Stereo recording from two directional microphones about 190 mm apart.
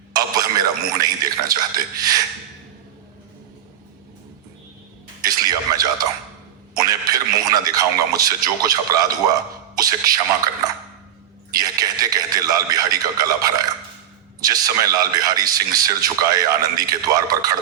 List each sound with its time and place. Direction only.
0.1 s a man's voice: 20° right (ahead or behind)
5.2 s a sound: 20° right (ahead or behind)
9.7 s a man's voice: 20° right (ahead or behind)
11.5 s a man's voice: 20° right (ahead or behind)